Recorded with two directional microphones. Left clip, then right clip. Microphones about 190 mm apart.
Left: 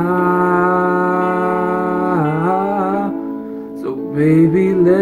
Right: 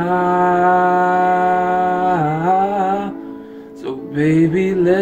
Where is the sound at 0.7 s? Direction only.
5° right (ahead or behind).